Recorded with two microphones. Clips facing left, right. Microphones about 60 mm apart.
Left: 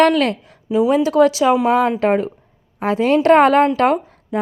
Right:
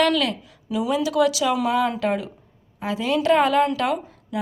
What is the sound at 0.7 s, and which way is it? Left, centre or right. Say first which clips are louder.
A woman's voice: left 8 dB; left.